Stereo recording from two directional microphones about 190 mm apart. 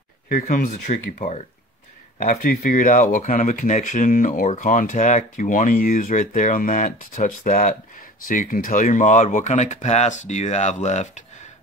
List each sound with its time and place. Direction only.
0.3 s speech: 45° left (ahead or behind)